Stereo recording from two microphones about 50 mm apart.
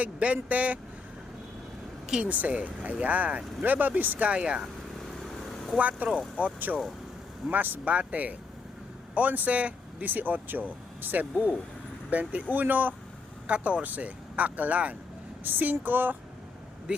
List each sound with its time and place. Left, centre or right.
0.0 s speech: right
2.2 s speech: right
4.3 s speech: right
5.7 s speech: right
13.5 s speech: right
15.4 s speech: right
16.9 s speech: right